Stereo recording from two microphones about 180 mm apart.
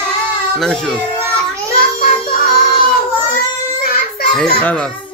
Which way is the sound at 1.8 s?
50° left (ahead or behind).